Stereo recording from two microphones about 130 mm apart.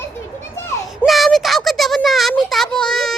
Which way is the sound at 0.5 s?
20° left (ahead or behind).